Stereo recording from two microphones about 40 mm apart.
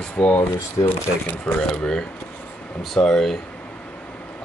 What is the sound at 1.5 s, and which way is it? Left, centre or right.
Speech, left.